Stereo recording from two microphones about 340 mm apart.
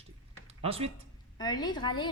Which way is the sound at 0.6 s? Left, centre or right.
Centre.